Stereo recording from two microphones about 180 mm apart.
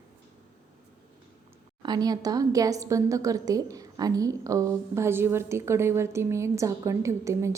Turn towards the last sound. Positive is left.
turn(degrees=-15)  # may be behind; listen again after turning